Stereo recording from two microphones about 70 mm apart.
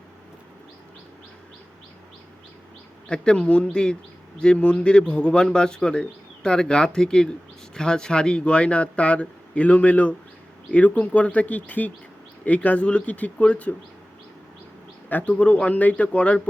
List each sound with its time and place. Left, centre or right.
3.1 s speech: centre
15.1 s speech: left